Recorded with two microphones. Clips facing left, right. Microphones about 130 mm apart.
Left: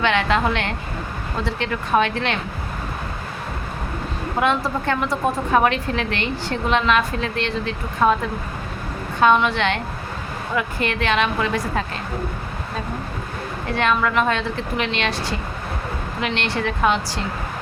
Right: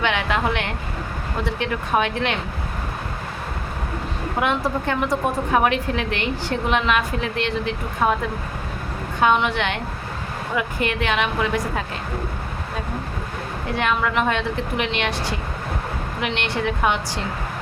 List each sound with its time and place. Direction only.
0.0 s a woman's voice: 15° right (ahead or behind)
4.4 s a woman's voice: 15° right (ahead or behind)
9.2 s a woman's voice: 15° right (ahead or behind)
13.7 s a woman's voice: 15° right (ahead or behind)